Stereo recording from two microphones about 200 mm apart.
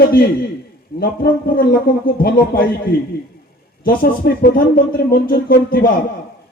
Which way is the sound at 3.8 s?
45° left (ahead or behind).